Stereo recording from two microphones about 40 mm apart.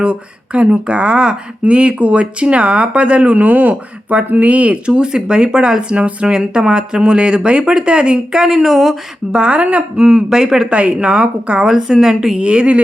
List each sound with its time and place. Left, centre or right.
0.0 s speech: right
4.9 s speech: right; by 9.0 s centre
9.3 s speech: right
10.8 s speech: right
11.7 s speech: centre